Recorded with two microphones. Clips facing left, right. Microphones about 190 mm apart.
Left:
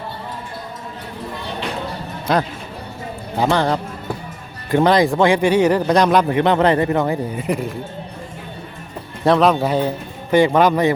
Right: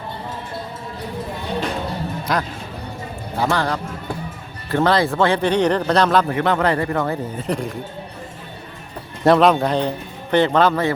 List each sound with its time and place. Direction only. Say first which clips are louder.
2.3 s a man's voice: left 6 dB; 25° left (ahead or behind); by 7.8 s 5° left (ahead or behind)
9.2 s a man's voice: right 1 dB; centre (ahead or behind); by 10.9 s 15° left (ahead or behind)